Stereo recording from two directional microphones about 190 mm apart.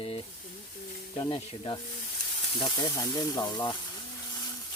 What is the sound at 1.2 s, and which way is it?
Speech, 25° left (ahead or behind).